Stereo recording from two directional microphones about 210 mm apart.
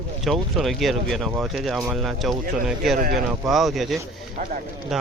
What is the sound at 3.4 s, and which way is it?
Speech, centre (ahead or behind).